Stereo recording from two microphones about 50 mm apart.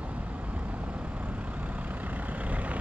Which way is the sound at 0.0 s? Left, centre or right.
Right.